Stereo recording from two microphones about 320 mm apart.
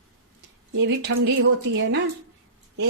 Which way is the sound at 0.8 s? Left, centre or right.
Right.